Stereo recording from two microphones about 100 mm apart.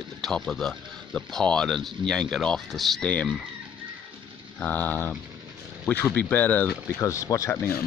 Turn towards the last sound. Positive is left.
turn(degrees=30)  # may be behind; listen again after turning